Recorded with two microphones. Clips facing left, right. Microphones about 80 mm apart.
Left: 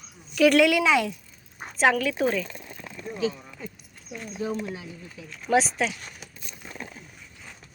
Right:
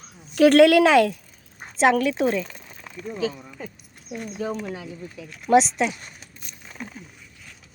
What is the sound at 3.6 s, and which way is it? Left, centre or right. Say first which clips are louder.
Speech: right 2 dB; right.